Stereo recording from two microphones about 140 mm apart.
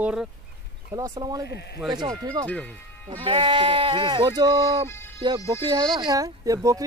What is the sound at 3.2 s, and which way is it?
Speech, 35° right (ahead or behind).